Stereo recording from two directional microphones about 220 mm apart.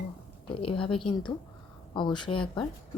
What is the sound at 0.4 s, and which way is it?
A woman's voice, 25° left (ahead or behind).